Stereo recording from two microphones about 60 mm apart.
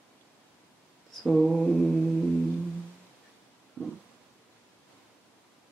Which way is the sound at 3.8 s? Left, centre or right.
Left.